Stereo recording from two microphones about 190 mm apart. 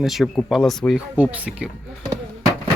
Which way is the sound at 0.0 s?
Centre (ahead or behind).